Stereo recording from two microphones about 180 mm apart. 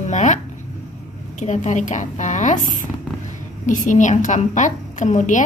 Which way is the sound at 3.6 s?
45° left (ahead or behind).